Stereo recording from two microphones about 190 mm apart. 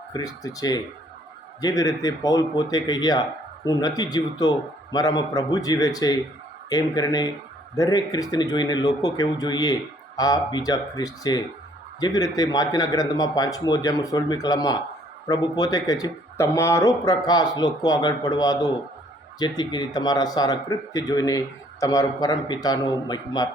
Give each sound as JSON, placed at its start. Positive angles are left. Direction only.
{"t": 0.1, "sound": "speech", "side_deg": 20}